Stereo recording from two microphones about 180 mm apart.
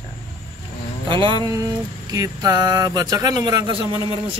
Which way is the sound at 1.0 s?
25° right (ahead or behind).